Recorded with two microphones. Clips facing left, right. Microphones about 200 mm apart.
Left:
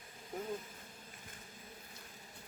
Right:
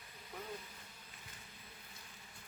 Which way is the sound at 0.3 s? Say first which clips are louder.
Left 7 dB; 45° left (ahead or behind).